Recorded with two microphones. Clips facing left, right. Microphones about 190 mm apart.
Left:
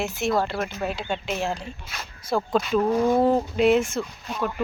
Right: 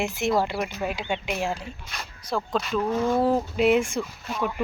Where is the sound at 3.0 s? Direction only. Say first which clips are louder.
Left 1 dB; 15° left (ahead or behind).